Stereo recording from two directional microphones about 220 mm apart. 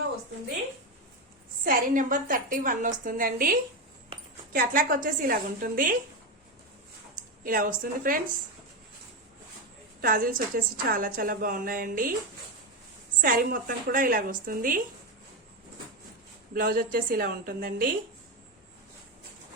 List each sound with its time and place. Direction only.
1.6 s a woman's voice: 40° right (ahead or behind)
7.4 s a woman's voice: 40° right (ahead or behind)
10.0 s a woman's voice: 40° right (ahead or behind)
13.2 s a woman's voice: 40° right (ahead or behind)
16.6 s a woman's voice: 40° right (ahead or behind)